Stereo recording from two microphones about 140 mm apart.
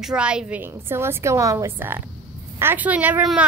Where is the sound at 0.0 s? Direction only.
5° right (ahead or behind).